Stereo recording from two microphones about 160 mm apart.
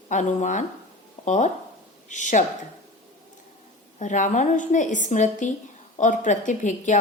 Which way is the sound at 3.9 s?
50° left (ahead or behind).